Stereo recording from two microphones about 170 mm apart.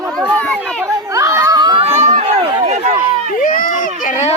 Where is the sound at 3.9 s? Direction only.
45° left (ahead or behind).